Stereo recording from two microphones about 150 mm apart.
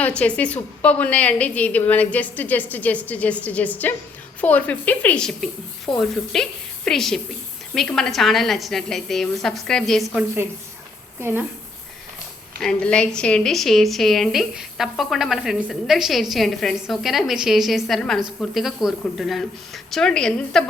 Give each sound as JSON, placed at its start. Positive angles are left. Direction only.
{"t": 0.2, "sound": "a woman's voice", "side_deg": 10}
{"t": 11.2, "sound": "a woman's voice", "side_deg": -15}
{"t": 12.5, "sound": "a woman's voice", "side_deg": 5}